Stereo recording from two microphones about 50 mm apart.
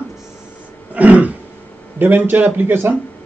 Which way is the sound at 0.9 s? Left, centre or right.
Right.